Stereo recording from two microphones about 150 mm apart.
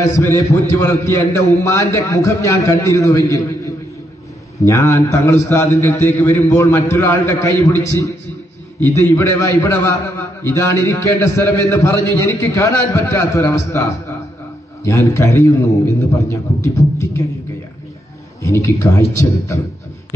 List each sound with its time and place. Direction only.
0.2 s a man's voice: 20° left (ahead or behind)
4.6 s a man's voice: 20° left (ahead or behind)
14.9 s a man's voice: 20° left (ahead or behind)
18.4 s a man's voice: 20° left (ahead or behind)